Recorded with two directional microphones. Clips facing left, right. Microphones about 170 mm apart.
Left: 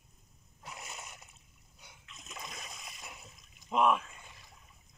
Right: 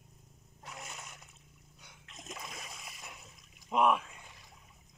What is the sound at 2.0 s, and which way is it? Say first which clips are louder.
Splash: right 6 dB; 50° right (ahead or behind).